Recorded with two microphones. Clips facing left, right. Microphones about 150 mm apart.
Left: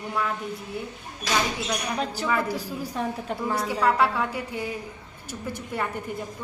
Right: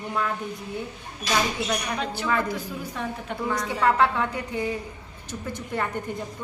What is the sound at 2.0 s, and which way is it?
A woman's voice, 35° left (ahead or behind).